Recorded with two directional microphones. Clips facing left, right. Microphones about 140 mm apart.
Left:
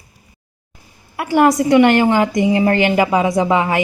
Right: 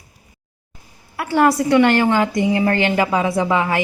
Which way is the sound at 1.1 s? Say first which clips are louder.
Left 2 dB; 20° left (ahead or behind).